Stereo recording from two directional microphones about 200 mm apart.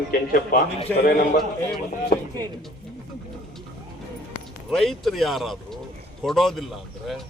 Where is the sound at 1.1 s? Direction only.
45° left (ahead or behind).